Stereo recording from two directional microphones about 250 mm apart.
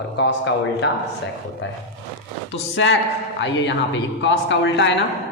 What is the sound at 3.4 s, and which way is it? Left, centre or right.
Speech, left.